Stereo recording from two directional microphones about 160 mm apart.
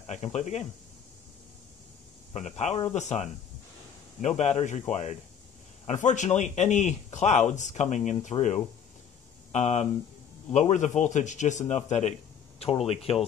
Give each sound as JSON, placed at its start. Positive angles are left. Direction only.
{"t": 0.1, "sound": "speech", "side_deg": 45}
{"t": 2.3, "sound": "speech", "side_deg": 45}
{"t": 5.9, "sound": "speech", "side_deg": 50}